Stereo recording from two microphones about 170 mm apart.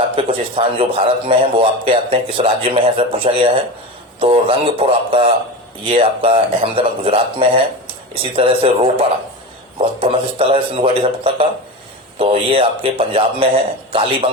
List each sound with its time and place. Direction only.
0.2 s a man's voice: 30° right (ahead or behind)